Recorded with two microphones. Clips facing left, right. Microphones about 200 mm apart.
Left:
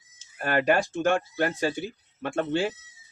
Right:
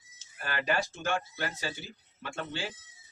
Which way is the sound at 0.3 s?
50° left (ahead or behind).